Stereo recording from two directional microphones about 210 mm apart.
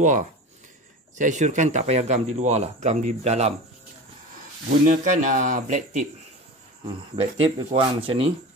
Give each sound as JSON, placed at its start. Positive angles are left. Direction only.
{"t": 0.0, "sound": "speech", "side_deg": -35}
{"t": 4.8, "sound": "speech", "side_deg": -35}
{"t": 6.9, "sound": "speech", "side_deg": -20}